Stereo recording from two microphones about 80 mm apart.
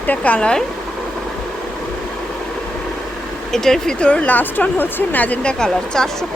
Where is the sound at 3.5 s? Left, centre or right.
Centre.